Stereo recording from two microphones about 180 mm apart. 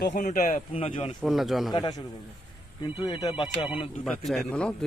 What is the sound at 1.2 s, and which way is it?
Speech, centre (ahead or behind).